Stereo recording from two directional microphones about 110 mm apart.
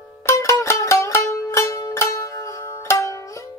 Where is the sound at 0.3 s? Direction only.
25° left (ahead or behind).